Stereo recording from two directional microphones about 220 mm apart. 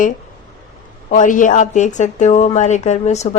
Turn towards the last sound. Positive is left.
turn(degrees=30)  # may be behind; listen again after turning